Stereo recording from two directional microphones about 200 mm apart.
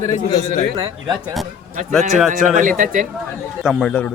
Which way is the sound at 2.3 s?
40° right (ahead or behind).